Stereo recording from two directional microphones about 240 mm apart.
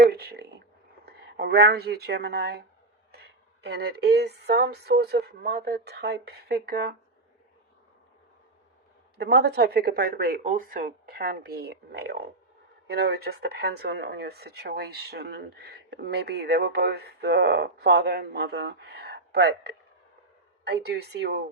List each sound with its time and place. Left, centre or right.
0.1 s a sound: right
1.0 s speech: right
9.1 s speech: right